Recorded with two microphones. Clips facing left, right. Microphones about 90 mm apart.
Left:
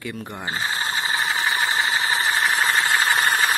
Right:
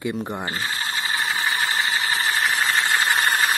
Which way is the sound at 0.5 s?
25° left (ahead or behind).